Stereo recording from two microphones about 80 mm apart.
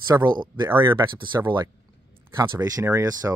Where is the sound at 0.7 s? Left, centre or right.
Right.